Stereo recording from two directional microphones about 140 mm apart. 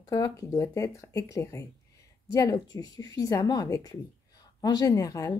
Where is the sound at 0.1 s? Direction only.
25° left (ahead or behind).